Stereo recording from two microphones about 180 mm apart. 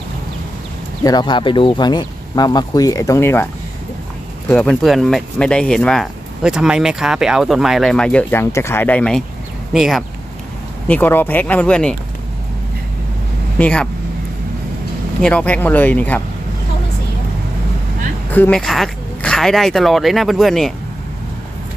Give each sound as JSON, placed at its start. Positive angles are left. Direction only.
{"t": 1.0, "sound": "speech", "side_deg": 25}
{"t": 4.5, "sound": "speech", "side_deg": 5}
{"t": 10.9, "sound": "speech", "side_deg": 10}
{"t": 13.6, "sound": "speech", "side_deg": 5}
{"t": 15.2, "sound": "speech", "side_deg": 5}
{"t": 18.3, "sound": "speech", "side_deg": 10}